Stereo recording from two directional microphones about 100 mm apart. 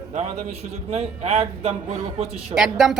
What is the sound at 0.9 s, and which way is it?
Speech, 90° right.